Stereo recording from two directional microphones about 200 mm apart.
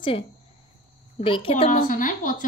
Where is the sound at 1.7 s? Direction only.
40° left (ahead or behind).